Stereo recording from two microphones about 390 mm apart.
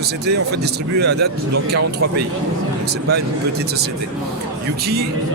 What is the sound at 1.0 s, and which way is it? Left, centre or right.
Speech, right.